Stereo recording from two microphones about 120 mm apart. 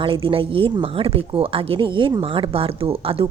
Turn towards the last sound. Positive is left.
turn(degrees=-50)  # may be behind; listen again after turning